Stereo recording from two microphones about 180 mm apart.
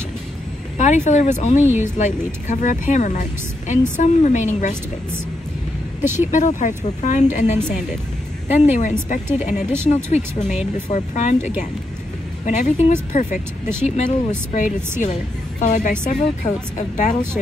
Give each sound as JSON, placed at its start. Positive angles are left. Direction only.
{"t": 0.7, "sound": "speech", "side_deg": 40}
{"t": 6.1, "sound": "speech", "side_deg": 40}
{"t": 8.5, "sound": "speech", "side_deg": 40}